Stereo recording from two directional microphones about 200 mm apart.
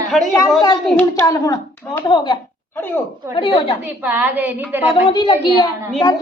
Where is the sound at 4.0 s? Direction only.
10° right (ahead or behind).